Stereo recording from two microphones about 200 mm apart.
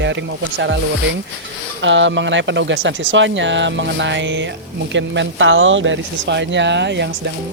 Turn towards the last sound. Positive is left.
turn(degrees=-60)  # may be behind; listen again after turning